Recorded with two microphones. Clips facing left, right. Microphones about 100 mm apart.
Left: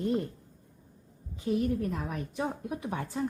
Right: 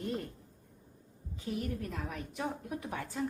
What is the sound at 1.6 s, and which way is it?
A woman's voice, 35° left (ahead or behind).